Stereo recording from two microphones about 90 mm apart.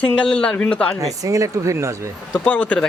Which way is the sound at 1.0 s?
40° right (ahead or behind).